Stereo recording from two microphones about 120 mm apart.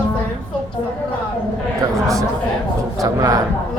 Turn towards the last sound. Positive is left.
turn(degrees=-30)  # may be behind; listen again after turning